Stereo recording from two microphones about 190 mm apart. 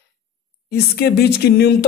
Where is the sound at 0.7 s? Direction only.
55° left (ahead or behind).